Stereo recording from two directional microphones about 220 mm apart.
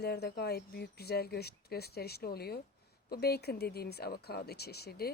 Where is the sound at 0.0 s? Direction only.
45° left (ahead or behind).